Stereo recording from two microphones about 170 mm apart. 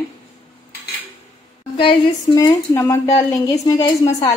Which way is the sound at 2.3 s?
20° left (ahead or behind).